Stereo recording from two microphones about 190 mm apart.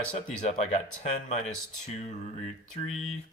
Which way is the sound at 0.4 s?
35° left (ahead or behind).